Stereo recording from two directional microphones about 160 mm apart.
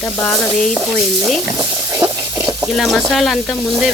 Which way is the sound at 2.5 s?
Centre (ahead or behind).